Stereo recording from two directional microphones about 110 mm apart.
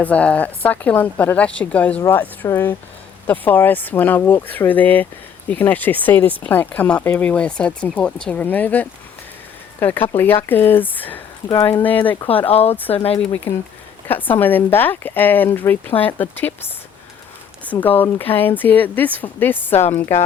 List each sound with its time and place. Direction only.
0.0 s speech: 10° left (ahead or behind)
12.5 s speech: 65° left (ahead or behind)
13.1 s speech: 15° left (ahead or behind)
17.7 s speech: 15° left (ahead or behind)